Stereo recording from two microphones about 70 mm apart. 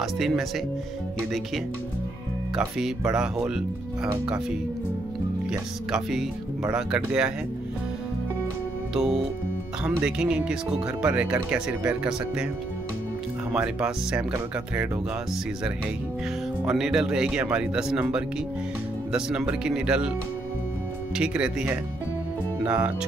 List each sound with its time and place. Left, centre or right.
0.0 s speech: centre
2.8 s speech: centre
5.5 s speech: centre
8.9 s speech: centre
13.5 s speech: centre
16.6 s speech: centre
21.2 s speech: centre